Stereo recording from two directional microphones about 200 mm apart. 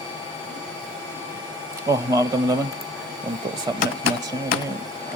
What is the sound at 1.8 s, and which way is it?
Speech, 15° right (ahead or behind).